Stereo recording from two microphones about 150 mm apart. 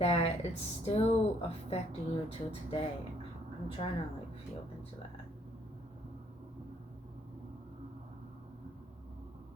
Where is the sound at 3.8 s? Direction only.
40° left (ahead or behind).